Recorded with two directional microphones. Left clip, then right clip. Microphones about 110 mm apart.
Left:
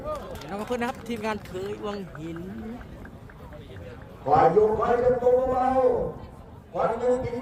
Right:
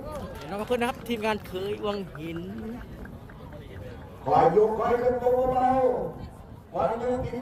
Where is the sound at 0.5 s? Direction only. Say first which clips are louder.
Right 2 dB; 15° right (ahead or behind).